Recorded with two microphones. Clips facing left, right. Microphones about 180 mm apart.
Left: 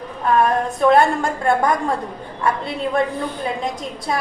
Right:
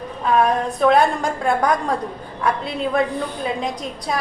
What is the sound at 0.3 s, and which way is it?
A woman's voice, centre (ahead or behind).